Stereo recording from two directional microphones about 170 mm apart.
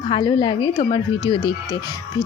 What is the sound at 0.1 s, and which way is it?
Speech, 25° left (ahead or behind).